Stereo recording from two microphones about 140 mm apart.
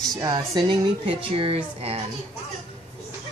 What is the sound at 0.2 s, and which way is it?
A woman's voice, 30° right (ahead or behind).